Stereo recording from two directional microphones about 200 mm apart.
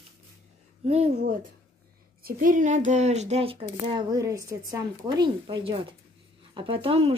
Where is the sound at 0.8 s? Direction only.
30° right (ahead or behind).